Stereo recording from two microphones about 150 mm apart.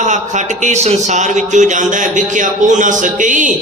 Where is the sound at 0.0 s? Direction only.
55° right (ahead or behind).